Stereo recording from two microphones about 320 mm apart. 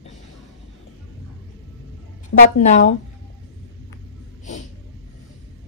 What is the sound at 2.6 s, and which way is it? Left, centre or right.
Speech, left.